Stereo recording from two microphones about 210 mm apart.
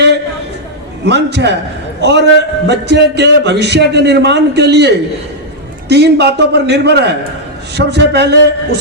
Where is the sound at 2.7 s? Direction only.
55° right (ahead or behind).